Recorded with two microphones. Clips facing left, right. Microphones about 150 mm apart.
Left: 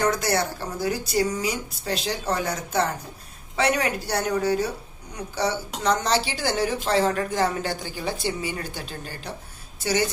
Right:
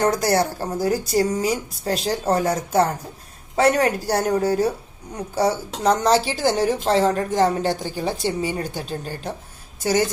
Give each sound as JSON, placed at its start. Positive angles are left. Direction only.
{"t": 0.0, "sound": "a woman's voice", "side_deg": -40}